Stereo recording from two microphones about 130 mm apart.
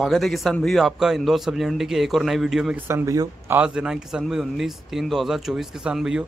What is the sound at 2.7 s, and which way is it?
Speech, 20° right (ahead or behind).